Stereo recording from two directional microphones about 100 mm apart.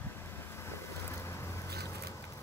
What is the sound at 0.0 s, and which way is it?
Vehicle, 25° left (ahead or behind).